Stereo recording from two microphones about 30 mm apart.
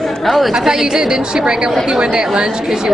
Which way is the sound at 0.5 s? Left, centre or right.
Centre.